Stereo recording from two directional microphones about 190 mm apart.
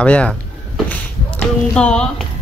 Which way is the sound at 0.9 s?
5° left (ahead or behind).